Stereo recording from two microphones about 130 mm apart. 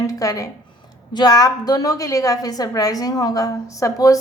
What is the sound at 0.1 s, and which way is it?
A woman's voice, 25° left (ahead or behind).